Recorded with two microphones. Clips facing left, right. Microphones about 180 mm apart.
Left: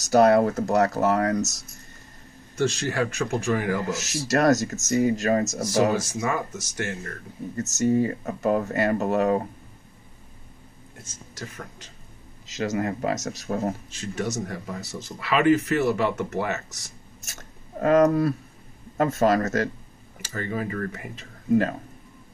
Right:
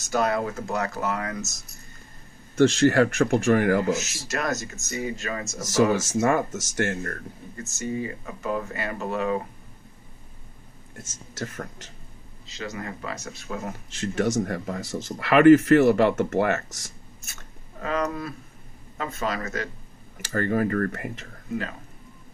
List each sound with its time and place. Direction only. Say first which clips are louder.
0.0 s speech: left 7 dB; 40° left (ahead or behind)
2.5 s speech: right 7 dB; 60° right (ahead or behind)
3.9 s speech: left 4 dB; 40° left (ahead or behind)
5.9 s speech: right 4 dB; 55° right (ahead or behind)
7.5 s speech: left 8 dB; 40° left (ahead or behind)
12.5 s speech: left 8 dB; 45° left (ahead or behind)
14.0 s speech: right 5 dB; 55° right (ahead or behind)
17.2 s a sound: left 2 dB; 40° left (ahead or behind)
18.9 s speech: left 9 dB; 45° left (ahead or behind)
20.3 s speech: right 6 dB; 60° right (ahead or behind)